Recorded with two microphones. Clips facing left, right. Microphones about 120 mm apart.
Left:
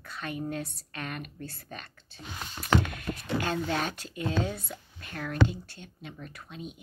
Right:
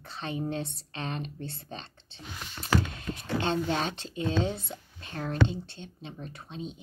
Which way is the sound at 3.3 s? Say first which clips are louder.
Right 2 dB; 25° right (ahead or behind).